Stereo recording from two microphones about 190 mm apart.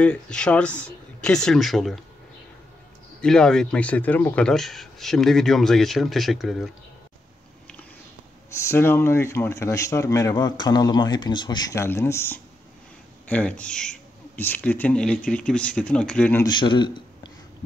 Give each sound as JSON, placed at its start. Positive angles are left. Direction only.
{"t": 0.0, "sound": "speech", "side_deg": 5}
{"t": 3.2, "sound": "speech", "side_deg": 5}
{"t": 8.6, "sound": "speech", "side_deg": 10}
{"t": 16.4, "sound": "speech", "side_deg": 25}